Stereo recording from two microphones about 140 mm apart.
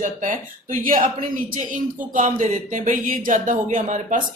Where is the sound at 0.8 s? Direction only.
80° right.